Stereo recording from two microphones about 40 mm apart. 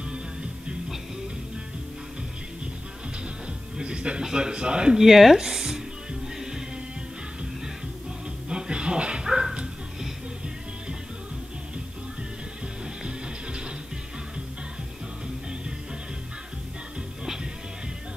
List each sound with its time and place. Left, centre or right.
3.7 s music: right
4.2 s speech: centre
4.9 s speech: centre
8.5 s dog: right